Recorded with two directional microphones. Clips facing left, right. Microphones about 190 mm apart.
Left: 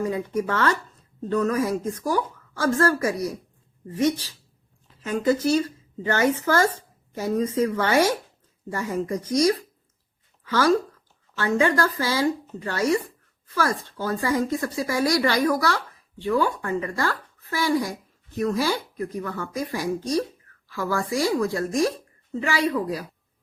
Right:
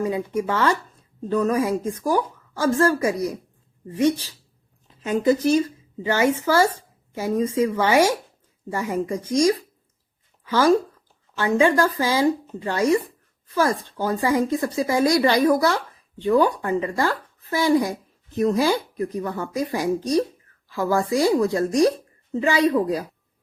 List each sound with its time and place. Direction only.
0.0 s a woman's voice: 15° right (ahead or behind)